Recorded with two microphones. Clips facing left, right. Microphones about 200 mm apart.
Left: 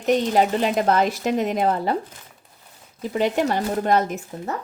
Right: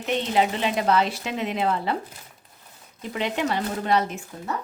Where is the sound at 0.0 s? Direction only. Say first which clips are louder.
Left 4 dB; 45° left (ahead or behind).